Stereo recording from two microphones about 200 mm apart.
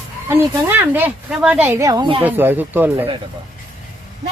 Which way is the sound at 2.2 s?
10° right (ahead or behind).